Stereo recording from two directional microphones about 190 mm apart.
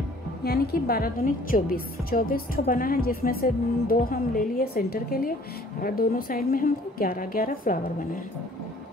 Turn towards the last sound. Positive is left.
turn(degrees=50)  # may be behind; listen again after turning